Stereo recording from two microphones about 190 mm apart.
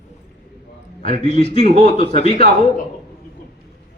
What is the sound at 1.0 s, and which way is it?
A man's voice, 30° left (ahead or behind).